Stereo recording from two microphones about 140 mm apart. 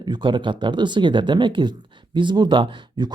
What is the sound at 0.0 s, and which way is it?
Speech, 35° right (ahead or behind).